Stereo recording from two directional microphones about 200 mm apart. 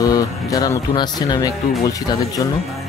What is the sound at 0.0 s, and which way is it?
Speech, 15° left (ahead or behind).